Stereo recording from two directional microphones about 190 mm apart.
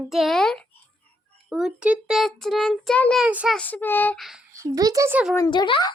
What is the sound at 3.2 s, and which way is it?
Child singing, 5° right (ahead or behind).